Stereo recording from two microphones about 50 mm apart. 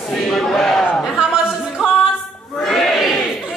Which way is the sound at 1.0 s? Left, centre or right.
Centre.